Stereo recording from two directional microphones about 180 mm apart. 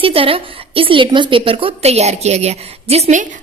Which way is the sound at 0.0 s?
30° right (ahead or behind).